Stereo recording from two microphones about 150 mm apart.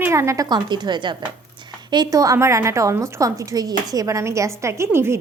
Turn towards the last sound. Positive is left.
turn(degrees=-15)  # may be behind; listen again after turning